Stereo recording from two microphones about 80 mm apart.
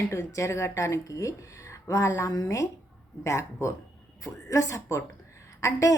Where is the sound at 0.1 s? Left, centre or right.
Left.